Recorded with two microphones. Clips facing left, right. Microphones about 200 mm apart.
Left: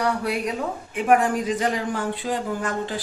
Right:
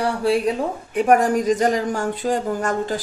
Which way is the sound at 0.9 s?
40° right (ahead or behind).